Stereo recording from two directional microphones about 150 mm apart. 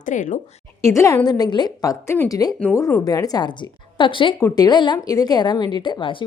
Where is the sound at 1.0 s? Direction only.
20° left (ahead or behind).